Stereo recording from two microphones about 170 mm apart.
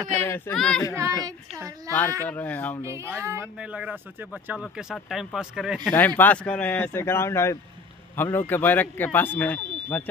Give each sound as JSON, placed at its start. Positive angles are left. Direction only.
{"t": 0.2, "sound": "speech", "side_deg": 15}
{"t": 0.9, "sound": "speech", "side_deg": -15}
{"t": 2.2, "sound": "speech", "side_deg": 10}
{"t": 2.8, "sound": "speech", "side_deg": -15}
{"t": 5.9, "sound": "speech", "side_deg": 10}